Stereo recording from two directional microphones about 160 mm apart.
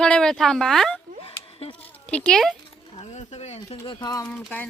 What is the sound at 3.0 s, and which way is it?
Speech, 40° left (ahead or behind).